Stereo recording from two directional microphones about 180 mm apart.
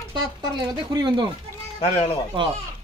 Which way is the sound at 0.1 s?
25° right (ahead or behind).